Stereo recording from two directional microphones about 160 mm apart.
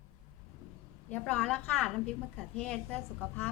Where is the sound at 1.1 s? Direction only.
10° left (ahead or behind).